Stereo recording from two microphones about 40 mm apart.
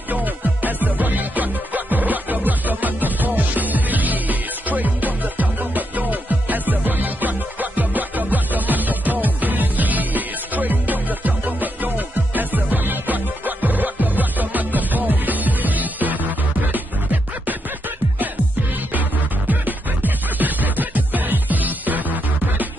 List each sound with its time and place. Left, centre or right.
0.1 s music: right
19.5 s music: right